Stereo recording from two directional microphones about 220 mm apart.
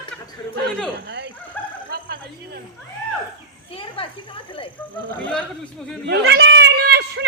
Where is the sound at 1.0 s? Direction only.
55° right (ahead or behind).